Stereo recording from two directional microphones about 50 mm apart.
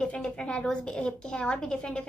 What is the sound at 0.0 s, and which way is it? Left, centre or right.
A woman's voice, centre.